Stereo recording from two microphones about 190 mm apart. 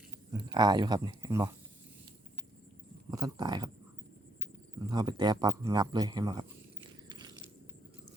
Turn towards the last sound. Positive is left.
turn(degrees=-20)  # may be behind; listen again after turning